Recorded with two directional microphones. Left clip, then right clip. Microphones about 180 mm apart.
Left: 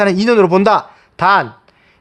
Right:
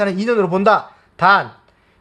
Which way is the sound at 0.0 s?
55° left (ahead or behind).